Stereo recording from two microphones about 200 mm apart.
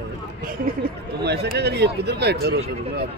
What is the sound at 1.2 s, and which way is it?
Speech, 55° right (ahead or behind).